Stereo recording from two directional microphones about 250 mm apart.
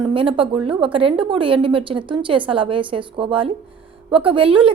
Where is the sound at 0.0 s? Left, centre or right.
Right.